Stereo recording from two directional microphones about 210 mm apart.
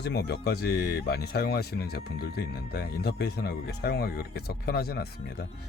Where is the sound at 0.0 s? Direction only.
50° left (ahead or behind).